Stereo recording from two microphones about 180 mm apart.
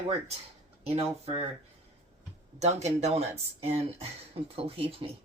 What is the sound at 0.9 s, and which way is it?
Speech, 35° right (ahead or behind).